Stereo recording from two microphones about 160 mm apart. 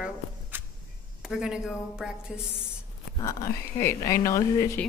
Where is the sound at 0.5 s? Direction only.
10° right (ahead or behind).